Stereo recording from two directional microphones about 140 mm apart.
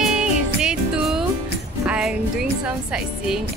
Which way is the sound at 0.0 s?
5° right (ahead or behind).